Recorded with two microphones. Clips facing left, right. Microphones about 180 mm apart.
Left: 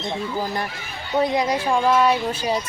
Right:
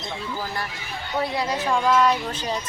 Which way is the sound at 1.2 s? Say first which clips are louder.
Left 5 dB; 15° left (ahead or behind).